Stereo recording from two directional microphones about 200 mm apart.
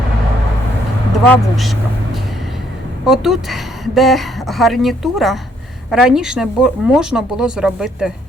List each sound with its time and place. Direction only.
1.3 s a woman's voice: centre (ahead or behind)
3.1 s a woman's voice: centre (ahead or behind)